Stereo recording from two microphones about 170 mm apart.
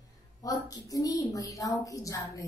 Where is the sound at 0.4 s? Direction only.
20° left (ahead or behind).